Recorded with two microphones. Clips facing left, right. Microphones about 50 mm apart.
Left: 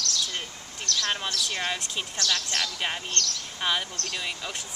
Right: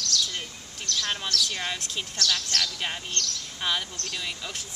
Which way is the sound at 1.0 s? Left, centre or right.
Centre.